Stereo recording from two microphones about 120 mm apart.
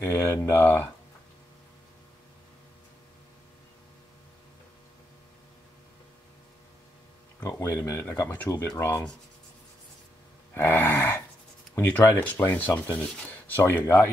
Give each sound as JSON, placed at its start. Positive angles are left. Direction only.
{"t": 0.0, "sound": "speech", "side_deg": 20}
{"t": 7.3, "sound": "speech", "side_deg": 20}
{"t": 10.5, "sound": "speech", "side_deg": 20}